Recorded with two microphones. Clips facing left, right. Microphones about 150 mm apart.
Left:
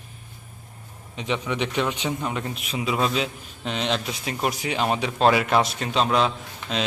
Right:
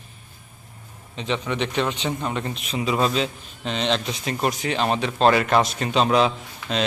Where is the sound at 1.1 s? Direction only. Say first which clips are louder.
Right 1 dB; 10° left (ahead or behind).